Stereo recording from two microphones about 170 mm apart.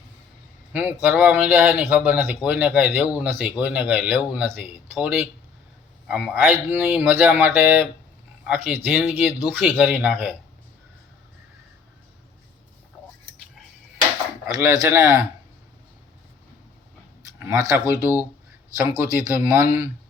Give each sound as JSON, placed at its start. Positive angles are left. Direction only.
{"t": 0.7, "sound": "speech", "side_deg": -10}
{"t": 14.4, "sound": "speech", "side_deg": -20}
{"t": 17.7, "sound": "speech", "side_deg": -20}